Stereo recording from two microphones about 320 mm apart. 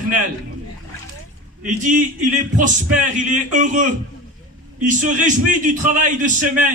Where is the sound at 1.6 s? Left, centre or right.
Right.